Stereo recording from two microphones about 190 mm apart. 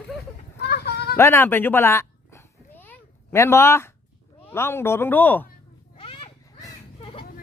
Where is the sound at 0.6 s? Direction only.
60° left (ahead or behind).